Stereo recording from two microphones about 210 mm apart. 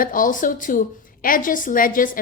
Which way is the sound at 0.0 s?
40° left (ahead or behind).